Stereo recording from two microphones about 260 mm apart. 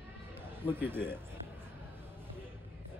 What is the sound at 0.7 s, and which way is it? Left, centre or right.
Speech, centre.